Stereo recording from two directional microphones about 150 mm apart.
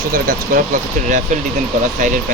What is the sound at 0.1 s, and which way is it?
Speech, 70° right (ahead or behind).